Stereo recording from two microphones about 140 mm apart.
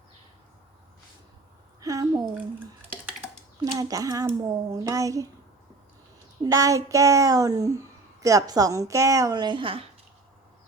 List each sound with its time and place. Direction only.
1.8 s a sound: 25° right (ahead or behind)
3.6 s a child's voice: 25° right (ahead or behind)
6.4 s a child's voice: 25° right (ahead or behind)